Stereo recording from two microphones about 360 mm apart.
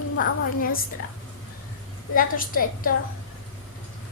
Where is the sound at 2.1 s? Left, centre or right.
Left.